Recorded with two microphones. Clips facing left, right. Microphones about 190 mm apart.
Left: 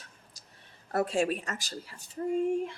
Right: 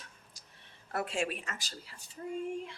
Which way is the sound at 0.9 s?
40° left (ahead or behind).